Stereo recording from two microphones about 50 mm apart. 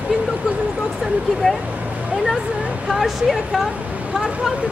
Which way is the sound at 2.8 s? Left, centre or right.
Centre.